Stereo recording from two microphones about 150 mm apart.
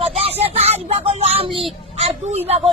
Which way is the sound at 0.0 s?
40° right (ahead or behind).